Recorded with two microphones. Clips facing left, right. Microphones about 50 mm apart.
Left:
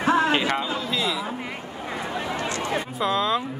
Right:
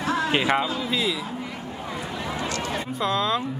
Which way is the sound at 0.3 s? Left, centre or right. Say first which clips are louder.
Right 1 dB; centre.